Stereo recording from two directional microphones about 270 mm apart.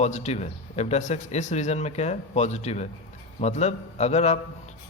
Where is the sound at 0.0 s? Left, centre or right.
Left.